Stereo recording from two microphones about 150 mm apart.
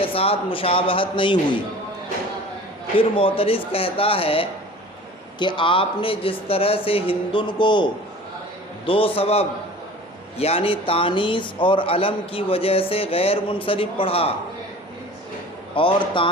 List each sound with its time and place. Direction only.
0.0 s a man's voice: 40° left (ahead or behind)
3.0 s a man's voice: 35° left (ahead or behind)
8.9 s a man's voice: 35° left (ahead or behind)
15.7 s a man's voice: 35° left (ahead or behind)